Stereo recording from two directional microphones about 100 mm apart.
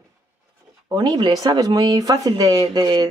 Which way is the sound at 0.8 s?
45° right (ahead or behind).